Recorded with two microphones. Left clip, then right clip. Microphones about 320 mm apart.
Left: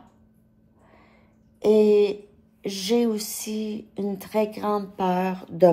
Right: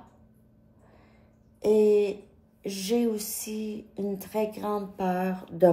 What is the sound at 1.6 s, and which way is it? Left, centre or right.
Speech, centre.